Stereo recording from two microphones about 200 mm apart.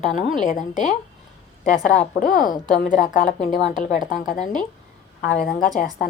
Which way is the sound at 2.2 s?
40° left (ahead or behind).